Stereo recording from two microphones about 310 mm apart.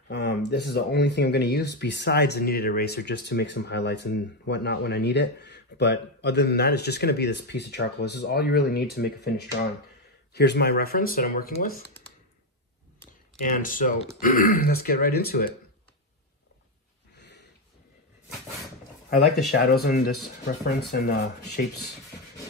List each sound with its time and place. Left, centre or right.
0.1 s speech: left
13.5 s speech: left
19.5 s speech: left